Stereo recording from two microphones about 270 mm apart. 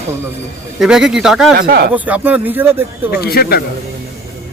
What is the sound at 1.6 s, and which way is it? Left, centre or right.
Speech, right.